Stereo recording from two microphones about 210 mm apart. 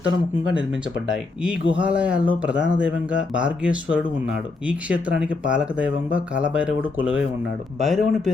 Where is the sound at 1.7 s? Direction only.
5° right (ahead or behind).